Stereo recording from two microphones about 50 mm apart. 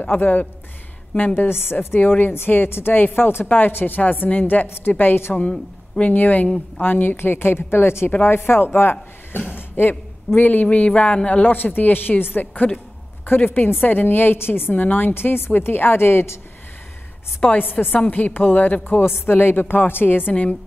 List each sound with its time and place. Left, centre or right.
0.0 s a woman's voice: left
1.3 s a woman's voice: left
4.6 s a woman's voice: left
5.9 s speech: left
6.9 s a woman's voice: left
11.5 s a woman's voice: left
17.4 s a woman's voice: left